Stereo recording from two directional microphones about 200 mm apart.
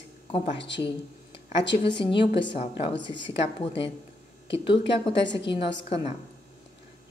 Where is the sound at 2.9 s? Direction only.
65° left (ahead or behind).